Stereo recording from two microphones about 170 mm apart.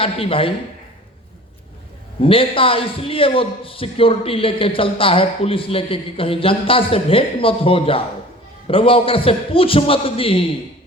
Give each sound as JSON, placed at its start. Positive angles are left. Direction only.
{"t": 0.0, "sound": "a man's voice", "side_deg": 35}
{"t": 2.2, "sound": "a man's voice", "side_deg": 30}